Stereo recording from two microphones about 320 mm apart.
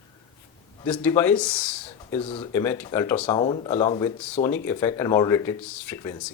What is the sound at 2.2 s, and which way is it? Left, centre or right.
Speech, centre.